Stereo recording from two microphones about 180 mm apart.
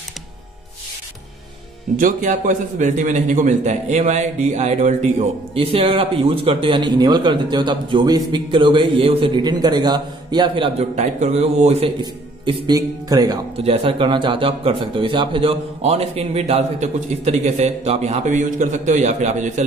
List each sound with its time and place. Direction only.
2.0 s a man's voice: 45° right (ahead or behind)
12.0 s speech: 25° right (ahead or behind)
13.7 s a man's voice: 30° right (ahead or behind)